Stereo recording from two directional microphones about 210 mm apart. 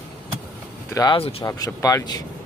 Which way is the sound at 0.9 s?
20° left (ahead or behind).